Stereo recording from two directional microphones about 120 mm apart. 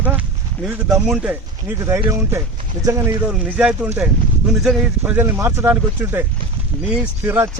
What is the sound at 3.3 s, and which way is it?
Speech, 10° right (ahead or behind).